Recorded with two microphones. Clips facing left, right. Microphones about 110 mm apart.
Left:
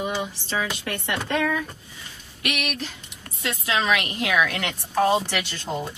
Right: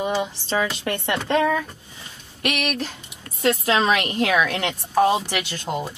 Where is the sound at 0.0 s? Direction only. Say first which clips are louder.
Right 4 dB; 30° right (ahead or behind).